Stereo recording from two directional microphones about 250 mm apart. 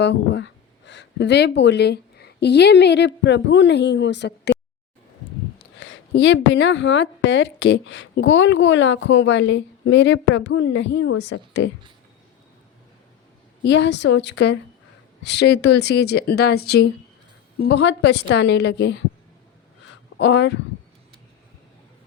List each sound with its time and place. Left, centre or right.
0.0 s speech: left
5.8 s a woman's voice: left
13.7 s a woman's voice: left
20.1 s a woman's voice: left